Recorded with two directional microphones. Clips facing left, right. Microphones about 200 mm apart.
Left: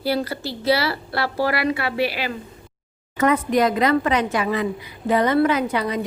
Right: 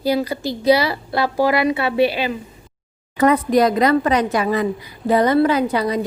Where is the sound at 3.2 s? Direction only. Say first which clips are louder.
Right 3 dB; 35° right (ahead or behind).